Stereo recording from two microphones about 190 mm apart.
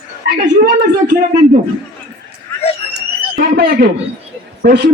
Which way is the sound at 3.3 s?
50° right (ahead or behind).